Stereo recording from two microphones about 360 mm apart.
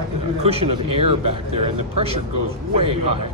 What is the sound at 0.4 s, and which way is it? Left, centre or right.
A man's voice, centre.